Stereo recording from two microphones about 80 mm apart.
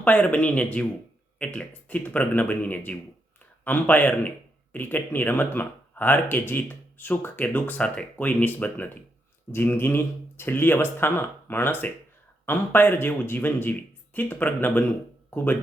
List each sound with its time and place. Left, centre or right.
0.0 s speech: centre